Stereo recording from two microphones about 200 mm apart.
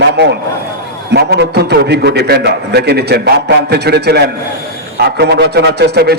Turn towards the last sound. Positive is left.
turn(degrees=-55)  # may be behind; listen again after turning